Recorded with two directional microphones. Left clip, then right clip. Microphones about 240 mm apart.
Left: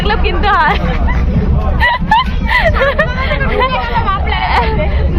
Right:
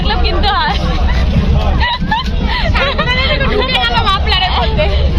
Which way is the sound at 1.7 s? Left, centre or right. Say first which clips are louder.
Left 6 dB; centre.